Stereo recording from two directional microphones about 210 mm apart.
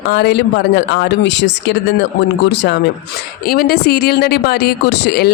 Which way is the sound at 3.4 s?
45° left (ahead or behind).